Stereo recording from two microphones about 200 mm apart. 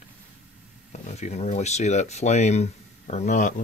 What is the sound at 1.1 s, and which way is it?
Speech, 35° left (ahead or behind).